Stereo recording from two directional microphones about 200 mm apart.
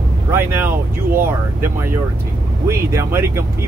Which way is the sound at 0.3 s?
10° right (ahead or behind).